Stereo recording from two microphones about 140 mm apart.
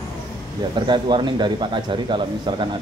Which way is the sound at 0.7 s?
35° right (ahead or behind).